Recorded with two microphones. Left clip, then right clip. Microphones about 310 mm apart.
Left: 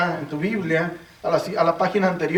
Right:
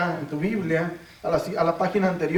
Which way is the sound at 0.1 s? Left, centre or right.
Centre.